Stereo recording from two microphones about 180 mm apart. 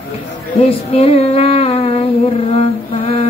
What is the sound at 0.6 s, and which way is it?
Female singing, 35° left (ahead or behind).